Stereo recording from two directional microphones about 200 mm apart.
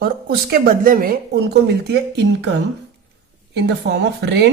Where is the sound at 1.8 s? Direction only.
55° right (ahead or behind).